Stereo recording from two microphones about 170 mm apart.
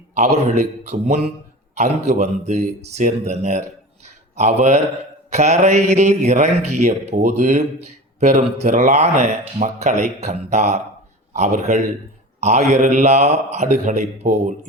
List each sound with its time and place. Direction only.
0.2 s speech: 40° right (ahead or behind)
4.0 s a sound: 40° right (ahead or behind)
5.3 s speech: 40° right (ahead or behind)